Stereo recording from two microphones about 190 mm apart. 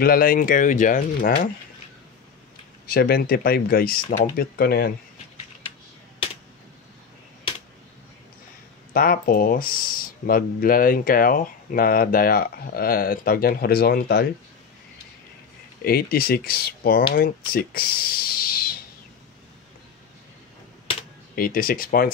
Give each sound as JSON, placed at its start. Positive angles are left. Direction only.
{"t": 0.0, "sound": "speech", "side_deg": 50}
{"t": 2.9, "sound": "speech", "side_deg": 55}
{"t": 8.9, "sound": "speech", "side_deg": 50}
{"t": 15.8, "sound": "speech", "side_deg": 55}
{"t": 21.4, "sound": "speech", "side_deg": 50}